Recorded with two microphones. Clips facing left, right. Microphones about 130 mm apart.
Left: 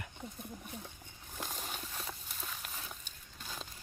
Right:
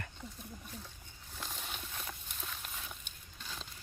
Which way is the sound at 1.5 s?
40° left (ahead or behind).